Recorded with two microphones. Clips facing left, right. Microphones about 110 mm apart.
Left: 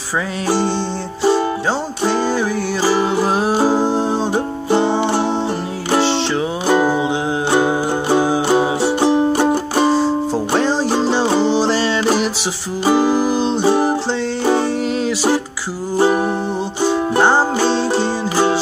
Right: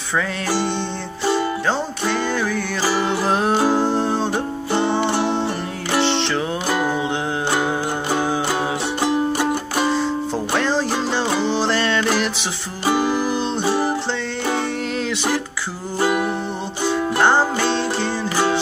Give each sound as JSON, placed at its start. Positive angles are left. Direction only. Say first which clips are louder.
{"t": 3.0, "sound": "music", "louder": "left 3 dB", "side_deg": 5}
{"t": 6.7, "sound": "music", "louder": "left 7 dB", "side_deg": 25}
{"t": 9.0, "sound": "music", "louder": "left 4 dB", "side_deg": 25}
{"t": 10.6, "sound": "music", "louder": "left 4 dB", "side_deg": 15}
{"t": 16.0, "sound": "music", "louder": "left 5 dB", "side_deg": 30}
{"t": 16.8, "sound": "music", "louder": "left 3 dB", "side_deg": 15}